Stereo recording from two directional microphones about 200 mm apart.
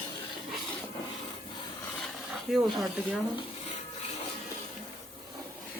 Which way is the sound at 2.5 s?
Centre (ahead or behind).